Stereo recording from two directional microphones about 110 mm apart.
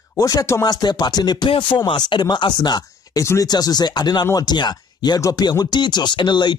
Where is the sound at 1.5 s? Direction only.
50° left (ahead or behind).